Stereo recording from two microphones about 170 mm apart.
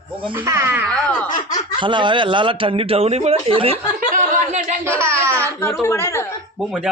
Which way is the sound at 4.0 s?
50° right (ahead or behind).